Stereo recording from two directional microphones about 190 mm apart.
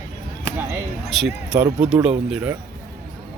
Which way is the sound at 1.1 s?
Centre (ahead or behind).